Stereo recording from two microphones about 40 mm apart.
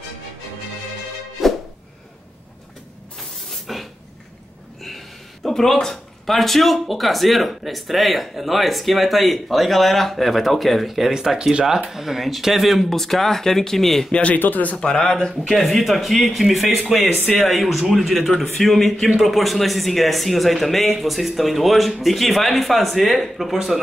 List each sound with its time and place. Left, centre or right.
1.4 s music: centre
3.2 s spray: centre
4.8 s speech: centre
11.1 s speech: centre
11.9 s speech: centre
12.9 s speech: centre
14.3 s speech: left
14.8 s speech: centre
15.5 s speech: centre